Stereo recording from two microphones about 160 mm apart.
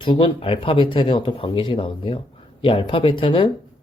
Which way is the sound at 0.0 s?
30° left (ahead or behind).